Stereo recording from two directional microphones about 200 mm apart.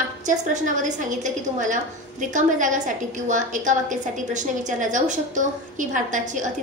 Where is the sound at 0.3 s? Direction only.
40° right (ahead or behind).